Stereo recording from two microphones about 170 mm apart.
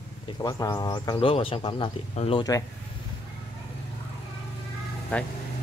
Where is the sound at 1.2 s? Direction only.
30° left (ahead or behind).